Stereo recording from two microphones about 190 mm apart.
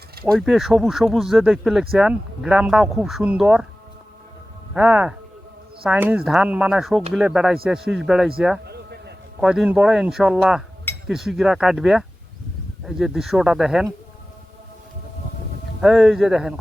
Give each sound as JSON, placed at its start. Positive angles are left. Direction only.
{"t": 0.3, "sound": "speech", "side_deg": 0}
{"t": 4.7, "sound": "speech", "side_deg": -5}
{"t": 8.6, "sound": "a sound", "side_deg": -60}
{"t": 9.4, "sound": "speech", "side_deg": -5}
{"t": 15.8, "sound": "speech", "side_deg": 0}